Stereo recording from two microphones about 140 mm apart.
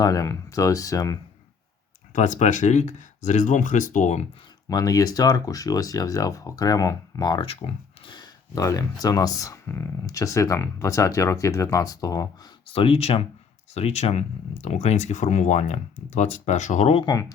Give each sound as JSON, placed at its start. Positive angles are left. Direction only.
{"t": 0.0, "sound": "speech", "side_deg": 25}
{"t": 2.1, "sound": "speech", "side_deg": 60}
{"t": 4.7, "sound": "speech", "side_deg": 25}
{"t": 7.4, "sound": "speech", "side_deg": 45}
{"t": 12.6, "sound": "speech", "side_deg": 40}
{"t": 17.0, "sound": "speech", "side_deg": 25}